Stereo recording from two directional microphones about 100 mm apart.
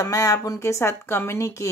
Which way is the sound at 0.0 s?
30° left (ahead or behind).